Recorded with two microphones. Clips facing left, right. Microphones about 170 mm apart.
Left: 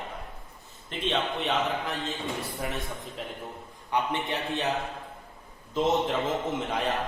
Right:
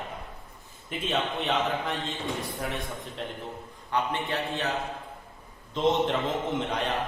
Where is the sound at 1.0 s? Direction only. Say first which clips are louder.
Left 1 dB; centre (ahead or behind).